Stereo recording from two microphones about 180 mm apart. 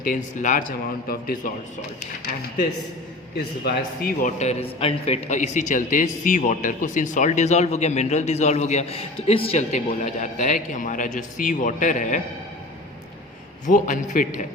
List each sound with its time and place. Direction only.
0.1 s a man's voice: 45° left (ahead or behind)
3.3 s a man's voice: 55° left (ahead or behind)
13.7 s a man's voice: 45° left (ahead or behind)